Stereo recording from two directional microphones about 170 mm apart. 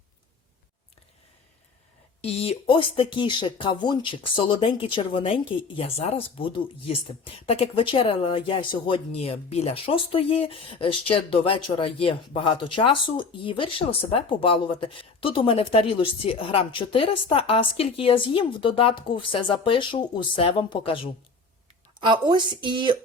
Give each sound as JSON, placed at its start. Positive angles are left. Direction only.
{"t": 2.2, "sound": "speech", "side_deg": 35}
{"t": 22.0, "sound": "a woman's voice", "side_deg": -25}